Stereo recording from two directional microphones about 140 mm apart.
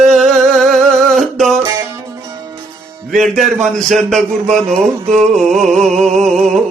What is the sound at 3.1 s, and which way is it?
Music, centre (ahead or behind).